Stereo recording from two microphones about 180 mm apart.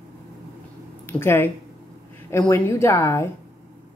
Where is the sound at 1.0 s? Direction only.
15° left (ahead or behind).